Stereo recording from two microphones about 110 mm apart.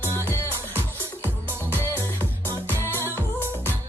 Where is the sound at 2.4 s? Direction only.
20° left (ahead or behind).